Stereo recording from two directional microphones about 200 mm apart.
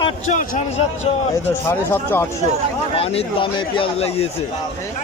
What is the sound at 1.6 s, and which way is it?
Speech, 10° left (ahead or behind).